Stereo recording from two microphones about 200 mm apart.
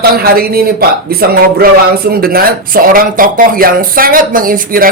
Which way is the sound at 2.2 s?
50° right (ahead or behind).